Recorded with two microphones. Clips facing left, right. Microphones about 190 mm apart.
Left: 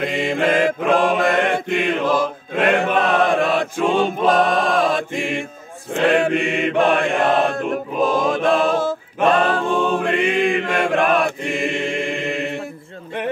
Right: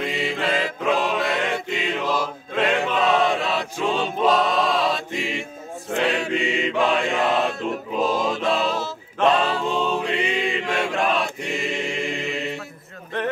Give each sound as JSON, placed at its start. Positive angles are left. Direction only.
{"t": 0.0, "sound": "mantra", "side_deg": 50}
{"t": 2.6, "sound": "choir", "side_deg": 55}
{"t": 6.0, "sound": "chant", "side_deg": 55}